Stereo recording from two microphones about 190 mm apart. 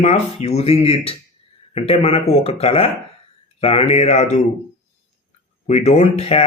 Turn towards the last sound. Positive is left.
turn(degrees=30)  # may be behind; listen again after turning